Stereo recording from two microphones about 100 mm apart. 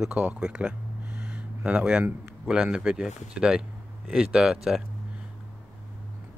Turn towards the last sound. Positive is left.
turn(degrees=-5)  # may be behind; listen again after turning